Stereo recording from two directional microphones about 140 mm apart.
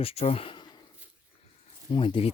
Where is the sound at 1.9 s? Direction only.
40° left (ahead or behind).